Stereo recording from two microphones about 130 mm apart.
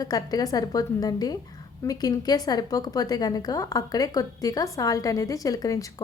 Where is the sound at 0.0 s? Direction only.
30° left (ahead or behind).